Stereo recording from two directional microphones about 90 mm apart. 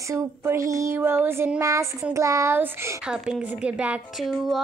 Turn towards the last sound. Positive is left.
turn(degrees=0)  # may be behind; listen again after turning